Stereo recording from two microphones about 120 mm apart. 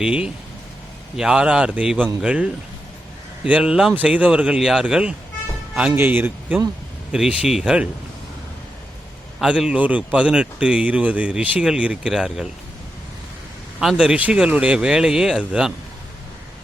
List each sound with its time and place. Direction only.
0.0 s speech: 5° right (ahead or behind)
6.0 s speech: 15° right (ahead or behind)
7.1 s speech: 5° right (ahead or behind)
9.4 s speech: 5° right (ahead or behind)
13.7 s speech: 5° right (ahead or behind)